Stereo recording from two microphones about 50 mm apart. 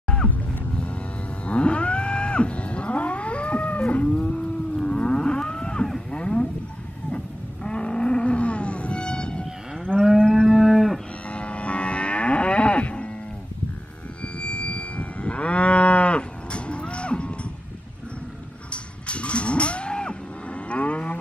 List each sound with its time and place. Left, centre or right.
0.1 s music: centre
1.5 s wild animals: left
4.0 s moo: centre
7.6 s wild animals: centre
10.1 s moo: centre
10.5 s moo: centre
11.2 s cattle: left
14.4 s moo: left
18.7 s cattle: left
20.7 s livestock: left